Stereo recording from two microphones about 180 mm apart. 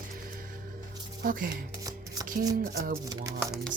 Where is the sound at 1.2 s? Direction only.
50° right (ahead or behind).